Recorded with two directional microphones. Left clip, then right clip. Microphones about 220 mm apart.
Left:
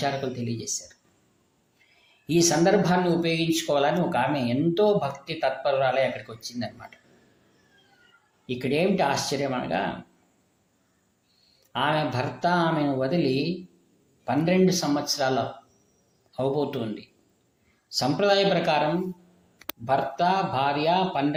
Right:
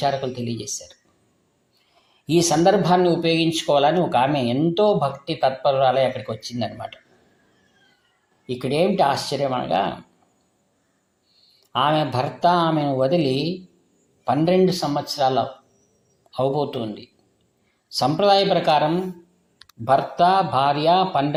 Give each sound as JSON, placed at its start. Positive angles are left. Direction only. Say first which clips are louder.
{"t": 0.0, "sound": "speech", "louder": "right 5 dB", "side_deg": -15}
{"t": 2.2, "sound": "speech", "louder": "right 4 dB", "side_deg": -20}
{"t": 8.4, "sound": "speech", "louder": "right 4 dB", "side_deg": -20}
{"t": 11.7, "sound": "speech", "louder": "right 5 dB", "side_deg": -20}
{"t": 19.8, "sound": "speech", "louder": "right 6 dB", "side_deg": -20}